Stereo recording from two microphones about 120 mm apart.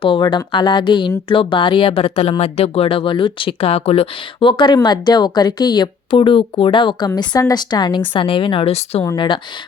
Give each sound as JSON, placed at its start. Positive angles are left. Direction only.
{"t": 0.0, "sound": "speech", "side_deg": 40}
{"t": 7.1, "sound": "a woman's voice", "side_deg": 30}
{"t": 9.1, "sound": "speech", "side_deg": 45}